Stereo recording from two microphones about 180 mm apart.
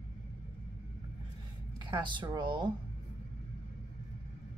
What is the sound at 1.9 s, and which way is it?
Speech, 25° right (ahead or behind).